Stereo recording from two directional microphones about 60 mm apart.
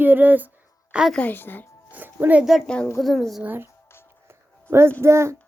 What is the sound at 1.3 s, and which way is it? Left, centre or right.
Speech, left.